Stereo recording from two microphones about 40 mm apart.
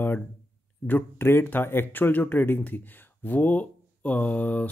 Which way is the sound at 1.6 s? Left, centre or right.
Left.